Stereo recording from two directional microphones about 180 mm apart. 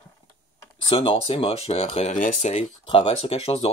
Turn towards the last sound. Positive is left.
turn(degrees=35)  # may be behind; listen again after turning